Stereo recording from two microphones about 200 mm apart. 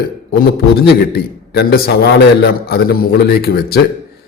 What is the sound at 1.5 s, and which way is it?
A man's voice, 55° left (ahead or behind).